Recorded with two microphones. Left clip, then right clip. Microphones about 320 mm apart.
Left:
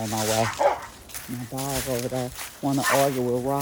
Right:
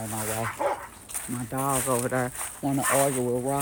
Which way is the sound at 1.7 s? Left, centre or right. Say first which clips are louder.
Right 2 dB; centre.